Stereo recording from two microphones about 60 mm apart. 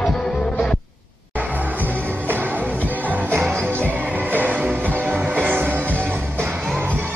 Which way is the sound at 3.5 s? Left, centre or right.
Right.